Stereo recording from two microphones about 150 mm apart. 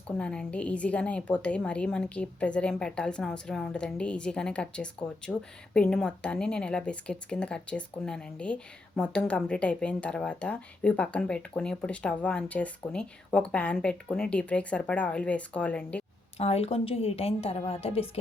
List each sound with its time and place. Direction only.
0.1 s a woman's voice: 5° left (ahead or behind)
16.4 s a woman's voice: 40° left (ahead or behind)